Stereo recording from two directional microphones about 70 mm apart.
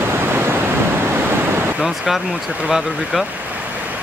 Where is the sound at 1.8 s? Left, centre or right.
Centre.